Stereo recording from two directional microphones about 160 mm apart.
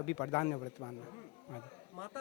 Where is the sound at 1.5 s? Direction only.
25° left (ahead or behind).